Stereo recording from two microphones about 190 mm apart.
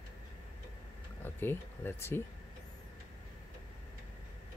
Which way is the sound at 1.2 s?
10° left (ahead or behind).